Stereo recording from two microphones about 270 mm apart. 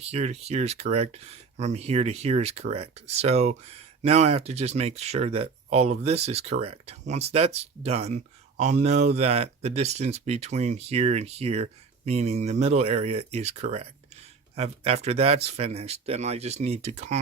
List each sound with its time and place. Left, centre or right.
0.0 s speech: right